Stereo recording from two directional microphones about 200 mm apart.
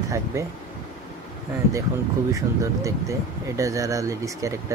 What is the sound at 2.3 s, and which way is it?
Speech, 15° right (ahead or behind).